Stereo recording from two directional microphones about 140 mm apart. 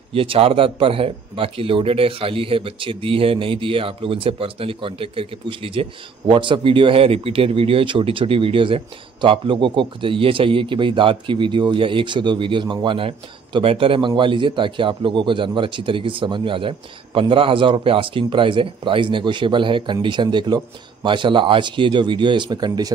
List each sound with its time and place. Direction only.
0.1 s speech: 40° right (ahead or behind)